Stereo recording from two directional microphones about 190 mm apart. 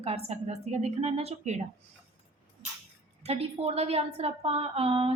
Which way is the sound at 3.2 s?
35° right (ahead or behind).